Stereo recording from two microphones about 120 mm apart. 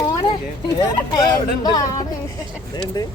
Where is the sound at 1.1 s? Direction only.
35° left (ahead or behind).